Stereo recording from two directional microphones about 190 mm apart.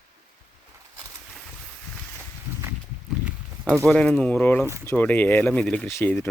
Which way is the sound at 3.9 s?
Centre (ahead or behind).